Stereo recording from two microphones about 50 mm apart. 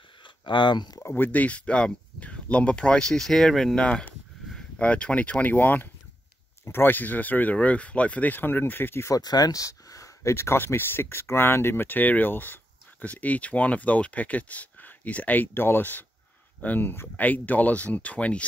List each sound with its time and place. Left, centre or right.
1.1 s speech: left; by 3.7 s centre
3.7 s speech: left
10.2 s speech: left